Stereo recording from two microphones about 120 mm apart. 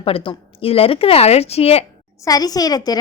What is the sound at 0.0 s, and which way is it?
A woman's voice, 50° left (ahead or behind).